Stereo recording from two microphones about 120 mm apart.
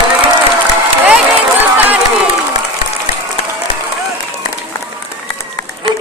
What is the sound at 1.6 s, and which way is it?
Speech, 15° right (ahead or behind).